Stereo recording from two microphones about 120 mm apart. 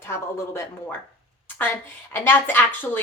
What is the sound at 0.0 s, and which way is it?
Speech, 20° left (ahead or behind).